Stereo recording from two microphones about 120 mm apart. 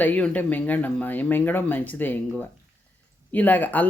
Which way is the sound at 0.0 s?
15° left (ahead or behind).